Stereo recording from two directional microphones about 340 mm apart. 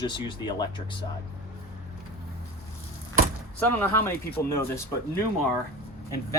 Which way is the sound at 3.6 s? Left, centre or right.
Centre.